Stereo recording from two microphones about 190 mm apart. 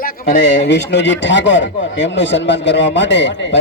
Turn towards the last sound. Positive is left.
turn(degrees=70)  # may be behind; listen again after turning